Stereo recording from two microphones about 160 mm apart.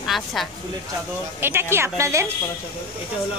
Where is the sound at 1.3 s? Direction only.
15° right (ahead or behind).